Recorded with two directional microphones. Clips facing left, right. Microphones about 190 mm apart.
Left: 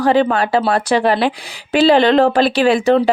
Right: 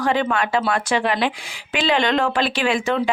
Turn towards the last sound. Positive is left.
turn(degrees=35)  # may be behind; listen again after turning